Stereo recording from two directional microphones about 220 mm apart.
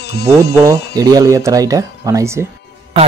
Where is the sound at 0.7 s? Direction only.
15° right (ahead or behind).